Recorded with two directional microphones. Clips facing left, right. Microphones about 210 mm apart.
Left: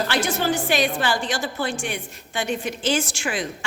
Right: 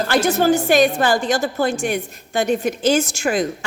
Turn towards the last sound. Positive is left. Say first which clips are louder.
# right 7 dB
turn(degrees=-40)  # may be behind; listen again after turning